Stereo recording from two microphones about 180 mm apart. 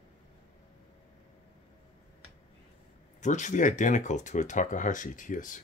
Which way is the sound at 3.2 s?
45° left (ahead or behind).